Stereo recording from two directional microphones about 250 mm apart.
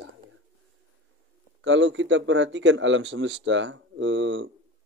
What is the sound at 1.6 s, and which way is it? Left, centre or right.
A man's voice, right.